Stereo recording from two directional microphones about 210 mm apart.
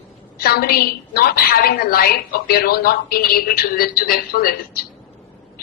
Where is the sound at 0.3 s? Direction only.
45° left (ahead or behind).